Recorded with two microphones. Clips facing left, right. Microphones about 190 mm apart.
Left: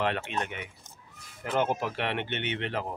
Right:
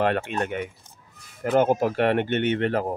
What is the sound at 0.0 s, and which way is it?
Speech, 50° right (ahead or behind).